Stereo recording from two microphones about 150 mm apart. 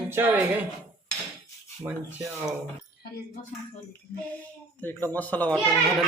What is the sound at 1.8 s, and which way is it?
Speech, 15° right (ahead or behind).